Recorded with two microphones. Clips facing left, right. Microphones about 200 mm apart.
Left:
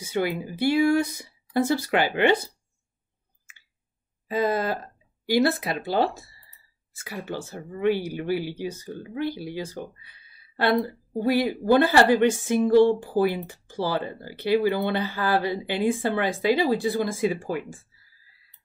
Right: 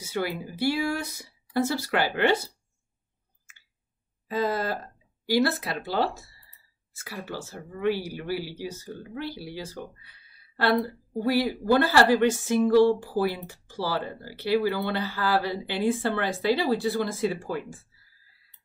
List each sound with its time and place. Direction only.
0.0 s speech: 20° left (ahead or behind)
4.3 s speech: 20° left (ahead or behind)
7.1 s speech: 20° left (ahead or behind)